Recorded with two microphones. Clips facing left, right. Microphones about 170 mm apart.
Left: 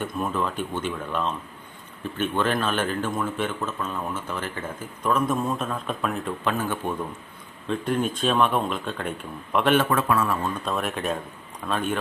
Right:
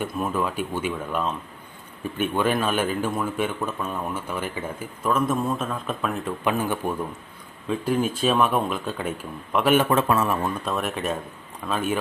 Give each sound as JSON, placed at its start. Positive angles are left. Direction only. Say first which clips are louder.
{"t": 0.0, "sound": "speech", "louder": "right 1 dB", "side_deg": -10}
{"t": 6.4, "sound": "speech", "louder": "right 3 dB", "side_deg": -10}
{"t": 9.7, "sound": "speech", "louder": "right 4 dB", "side_deg": -25}
{"t": 10.6, "sound": "speech", "louder": "right 1 dB", "side_deg": 0}